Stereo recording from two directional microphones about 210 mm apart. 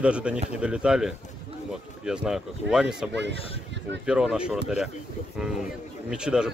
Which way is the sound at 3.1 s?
55° right (ahead or behind).